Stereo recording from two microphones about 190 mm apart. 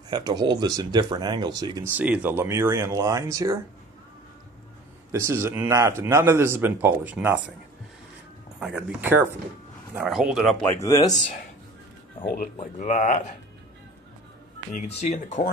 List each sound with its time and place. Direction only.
0.1 s speech: 20° right (ahead or behind)
2.0 s a man's voice: 5° right (ahead or behind)
5.1 s a man's voice: 15° right (ahead or behind)
8.5 s a man's voice: 5° right (ahead or behind)
10.7 s speech: 15° left (ahead or behind)
12.5 s speech: 40° left (ahead or behind)
14.7 s speech: 35° left (ahead or behind)